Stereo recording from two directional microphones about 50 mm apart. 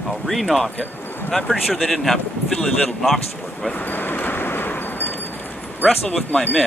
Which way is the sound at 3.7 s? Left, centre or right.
Left.